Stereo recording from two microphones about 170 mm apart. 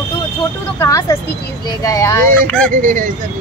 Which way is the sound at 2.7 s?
50° right (ahead or behind).